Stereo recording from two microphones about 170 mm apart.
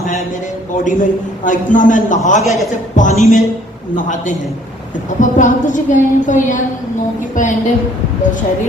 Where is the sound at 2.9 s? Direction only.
45° left (ahead or behind).